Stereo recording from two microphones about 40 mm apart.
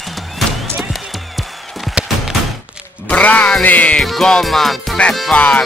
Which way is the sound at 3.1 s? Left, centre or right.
Left.